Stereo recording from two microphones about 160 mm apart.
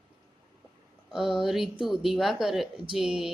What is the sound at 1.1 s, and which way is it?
A woman's voice, 5° right (ahead or behind).